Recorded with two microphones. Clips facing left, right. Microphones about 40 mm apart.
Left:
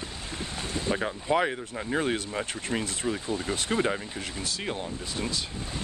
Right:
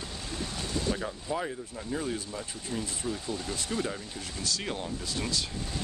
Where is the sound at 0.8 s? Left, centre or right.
Left.